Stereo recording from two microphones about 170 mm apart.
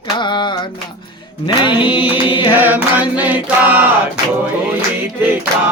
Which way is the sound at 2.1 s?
30° left (ahead or behind).